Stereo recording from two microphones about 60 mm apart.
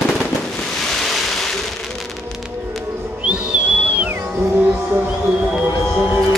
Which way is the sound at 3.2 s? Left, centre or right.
Centre.